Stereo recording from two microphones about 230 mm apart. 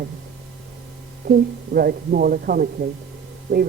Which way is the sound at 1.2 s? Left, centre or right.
Right.